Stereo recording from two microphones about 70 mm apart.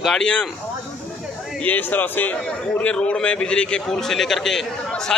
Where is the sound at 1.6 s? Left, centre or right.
Left.